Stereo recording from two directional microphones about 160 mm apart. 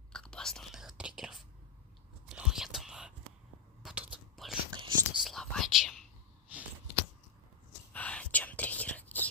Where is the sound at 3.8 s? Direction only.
5° right (ahead or behind).